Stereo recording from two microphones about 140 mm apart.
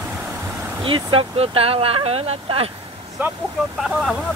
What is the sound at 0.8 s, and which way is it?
Speech, 40° right (ahead or behind).